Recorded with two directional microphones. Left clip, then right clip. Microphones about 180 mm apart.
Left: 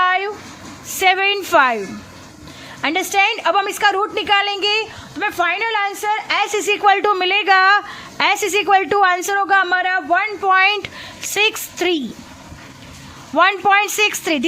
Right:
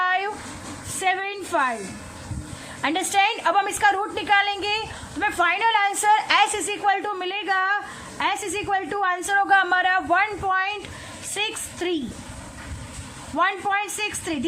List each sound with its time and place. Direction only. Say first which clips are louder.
0.0 s a sound: left 6 dB; 30° left (ahead or behind)
0.9 s a sound: left 9 dB; 40° left (ahead or behind)
2.8 s a woman's voice: left 5 dB; 30° left (ahead or behind)
6.5 s a woman's voice: left 8 dB; 30° left (ahead or behind)
10.4 s a woman's voice: left 9 dB; 35° left (ahead or behind)
13.3 s a woman's voice: left 9 dB; 40° left (ahead or behind)